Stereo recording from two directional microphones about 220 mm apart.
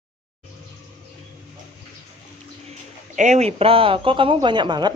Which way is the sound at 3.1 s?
35° right (ahead or behind).